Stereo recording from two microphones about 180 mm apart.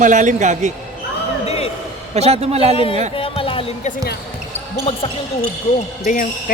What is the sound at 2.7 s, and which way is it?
Speech, 30° left (ahead or behind).